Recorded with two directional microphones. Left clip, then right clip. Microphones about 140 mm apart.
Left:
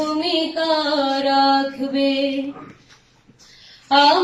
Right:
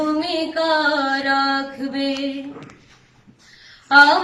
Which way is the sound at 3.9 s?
20° left (ahead or behind).